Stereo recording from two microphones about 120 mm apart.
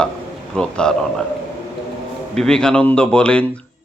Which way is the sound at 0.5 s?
5° left (ahead or behind).